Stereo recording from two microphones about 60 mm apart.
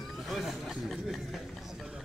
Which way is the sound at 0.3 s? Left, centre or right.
Centre.